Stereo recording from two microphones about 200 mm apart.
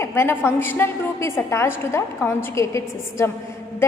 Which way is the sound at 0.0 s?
10° left (ahead or behind).